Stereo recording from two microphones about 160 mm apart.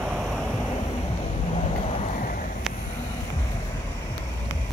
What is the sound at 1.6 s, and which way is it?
Vehicle, 45° left (ahead or behind).